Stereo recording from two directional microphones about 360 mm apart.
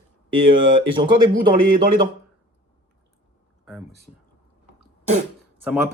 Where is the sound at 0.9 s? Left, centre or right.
Centre.